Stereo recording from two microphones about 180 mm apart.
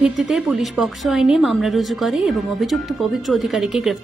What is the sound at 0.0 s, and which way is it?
A woman's voice, 5° right (ahead or behind).